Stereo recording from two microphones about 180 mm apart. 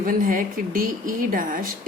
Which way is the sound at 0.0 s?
50° right (ahead or behind).